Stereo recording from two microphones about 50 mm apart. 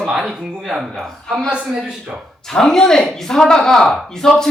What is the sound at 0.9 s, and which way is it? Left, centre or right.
Speech, centre.